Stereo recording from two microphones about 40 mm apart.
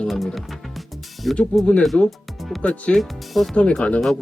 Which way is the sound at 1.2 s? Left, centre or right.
Centre.